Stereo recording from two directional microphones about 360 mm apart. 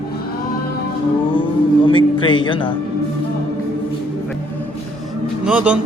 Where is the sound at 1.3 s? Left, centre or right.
Centre.